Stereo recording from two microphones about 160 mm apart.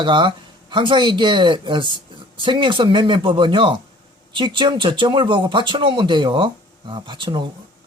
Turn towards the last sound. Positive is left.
turn(degrees=-30)  # may be behind; listen again after turning